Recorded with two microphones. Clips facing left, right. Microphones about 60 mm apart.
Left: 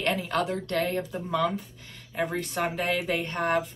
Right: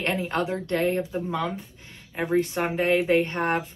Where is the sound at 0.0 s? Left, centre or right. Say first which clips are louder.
Right 1 dB; right.